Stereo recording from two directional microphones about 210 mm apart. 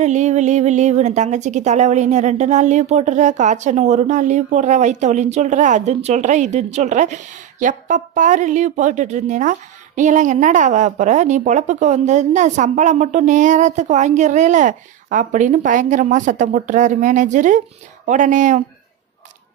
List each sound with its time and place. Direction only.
0.0 s a woman's voice: 35° right (ahead or behind)